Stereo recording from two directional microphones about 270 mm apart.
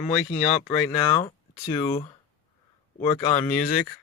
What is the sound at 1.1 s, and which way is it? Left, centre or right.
Speech, centre.